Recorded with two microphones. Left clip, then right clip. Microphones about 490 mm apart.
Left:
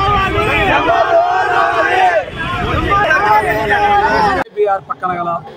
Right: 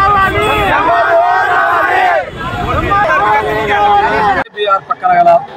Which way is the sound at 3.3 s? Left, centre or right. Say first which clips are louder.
Even; centre.